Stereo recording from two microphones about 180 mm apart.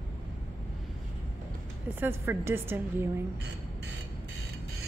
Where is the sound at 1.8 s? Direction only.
10° right (ahead or behind).